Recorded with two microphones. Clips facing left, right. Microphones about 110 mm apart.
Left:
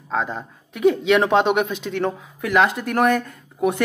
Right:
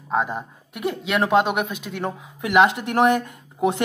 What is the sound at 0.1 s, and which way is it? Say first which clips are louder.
A woman's voice: right 1 dB; 15° right (ahead or behind).